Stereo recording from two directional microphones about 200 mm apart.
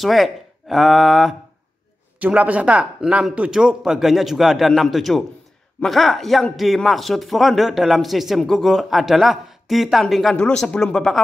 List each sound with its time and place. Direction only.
0.0 s speech: centre (ahead or behind)